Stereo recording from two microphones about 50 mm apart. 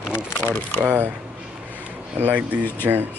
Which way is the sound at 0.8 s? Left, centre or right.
Right.